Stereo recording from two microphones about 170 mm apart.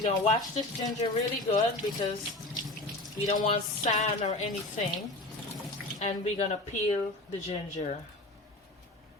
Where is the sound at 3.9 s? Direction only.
50° left (ahead or behind).